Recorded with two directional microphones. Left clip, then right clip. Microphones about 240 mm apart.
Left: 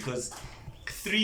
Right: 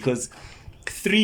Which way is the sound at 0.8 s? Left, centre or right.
Right.